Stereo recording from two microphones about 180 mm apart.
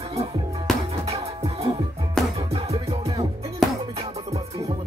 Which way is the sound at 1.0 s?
35° right (ahead or behind).